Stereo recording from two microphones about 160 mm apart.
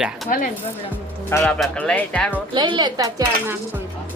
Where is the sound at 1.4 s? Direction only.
5° left (ahead or behind).